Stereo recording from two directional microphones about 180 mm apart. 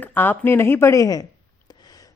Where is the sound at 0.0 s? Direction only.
10° left (ahead or behind).